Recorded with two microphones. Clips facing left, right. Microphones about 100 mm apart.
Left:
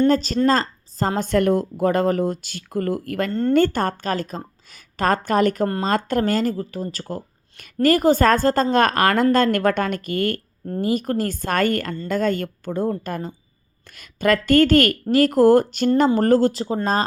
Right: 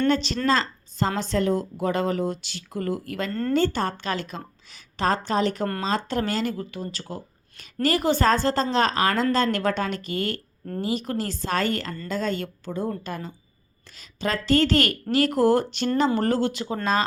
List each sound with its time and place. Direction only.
0.1 s a woman's voice: 40° left (ahead or behind)